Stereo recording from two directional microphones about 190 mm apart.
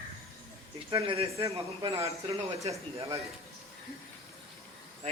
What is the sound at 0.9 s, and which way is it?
Speech, 25° right (ahead or behind).